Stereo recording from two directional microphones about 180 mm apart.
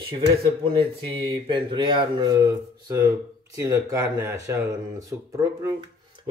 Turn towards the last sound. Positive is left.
turn(degrees=-15)  # may be behind; listen again after turning